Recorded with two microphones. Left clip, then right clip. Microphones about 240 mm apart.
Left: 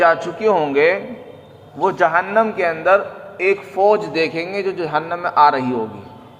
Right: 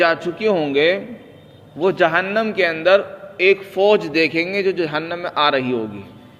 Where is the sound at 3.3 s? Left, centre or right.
Right.